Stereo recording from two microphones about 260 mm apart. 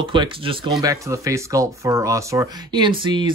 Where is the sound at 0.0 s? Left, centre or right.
Centre.